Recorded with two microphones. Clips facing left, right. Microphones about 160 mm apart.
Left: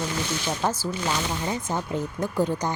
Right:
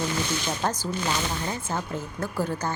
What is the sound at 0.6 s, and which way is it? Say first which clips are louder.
Speech: left 2 dB; 10° left (ahead or behind).